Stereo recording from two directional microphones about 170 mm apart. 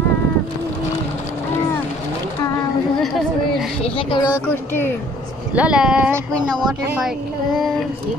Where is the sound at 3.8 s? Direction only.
30° left (ahead or behind).